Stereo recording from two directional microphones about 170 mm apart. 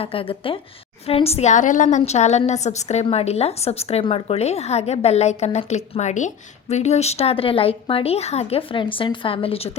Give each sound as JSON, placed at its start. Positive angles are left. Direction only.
{"t": 0.0, "sound": "a woman's voice", "side_deg": 35}